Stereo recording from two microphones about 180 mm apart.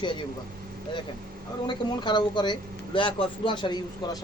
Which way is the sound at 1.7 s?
25° left (ahead or behind).